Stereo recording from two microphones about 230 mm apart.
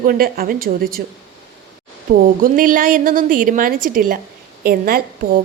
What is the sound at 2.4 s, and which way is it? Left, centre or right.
A woman's voice, right.